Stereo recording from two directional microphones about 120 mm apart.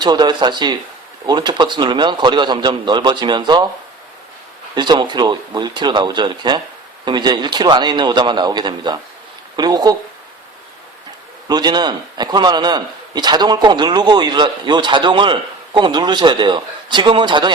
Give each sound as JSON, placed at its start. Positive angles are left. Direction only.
{"t": 0.0, "sound": "a man's voice", "side_deg": -35}
{"t": 4.7, "sound": "a man's voice", "side_deg": -40}
{"t": 11.4, "sound": "a man's voice", "side_deg": -35}